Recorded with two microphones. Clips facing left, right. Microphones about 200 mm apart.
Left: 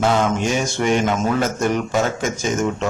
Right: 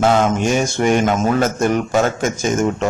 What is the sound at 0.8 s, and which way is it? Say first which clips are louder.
A man's voice: right 2 dB; 50° right (ahead or behind).